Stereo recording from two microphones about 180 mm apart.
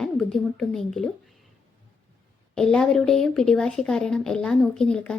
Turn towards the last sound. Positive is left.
turn(degrees=5)  # may be behind; listen again after turning